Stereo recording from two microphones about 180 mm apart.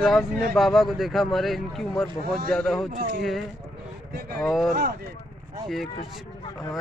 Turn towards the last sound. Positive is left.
turn(degrees=25)  # may be behind; listen again after turning